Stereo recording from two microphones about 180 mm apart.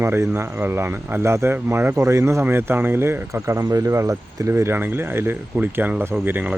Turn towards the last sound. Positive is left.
turn(degrees=-5)  # may be behind; listen again after turning